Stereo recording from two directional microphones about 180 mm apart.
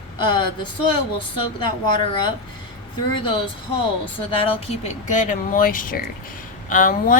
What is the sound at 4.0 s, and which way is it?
Speech, 30° left (ahead or behind).